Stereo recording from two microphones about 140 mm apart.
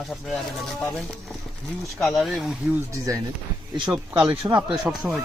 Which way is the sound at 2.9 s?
20° right (ahead or behind).